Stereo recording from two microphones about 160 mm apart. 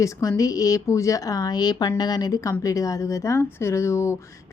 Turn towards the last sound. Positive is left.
turn(degrees=15)  # may be behind; listen again after turning